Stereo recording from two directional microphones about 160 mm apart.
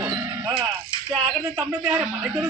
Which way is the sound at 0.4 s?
30° right (ahead or behind).